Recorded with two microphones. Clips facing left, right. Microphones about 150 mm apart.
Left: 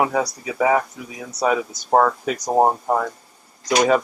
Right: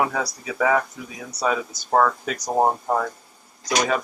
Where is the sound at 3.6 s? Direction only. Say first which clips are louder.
Left 6 dB; 25° left (ahead or behind).